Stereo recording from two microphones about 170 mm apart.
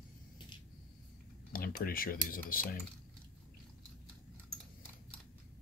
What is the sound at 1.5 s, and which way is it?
Speech, 60° left (ahead or behind).